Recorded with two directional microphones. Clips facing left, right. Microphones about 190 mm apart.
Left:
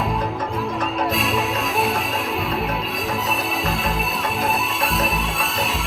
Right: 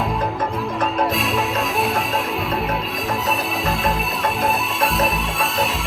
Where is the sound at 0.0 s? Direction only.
Centre (ahead or behind).